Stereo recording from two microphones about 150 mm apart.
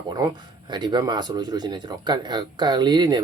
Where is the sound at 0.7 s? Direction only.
30° right (ahead or behind).